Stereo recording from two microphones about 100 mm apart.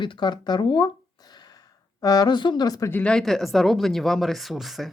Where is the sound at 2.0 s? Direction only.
40° left (ahead or behind).